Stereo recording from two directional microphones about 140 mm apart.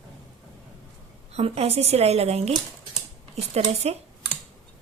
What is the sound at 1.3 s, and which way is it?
A woman's voice, 50° right (ahead or behind).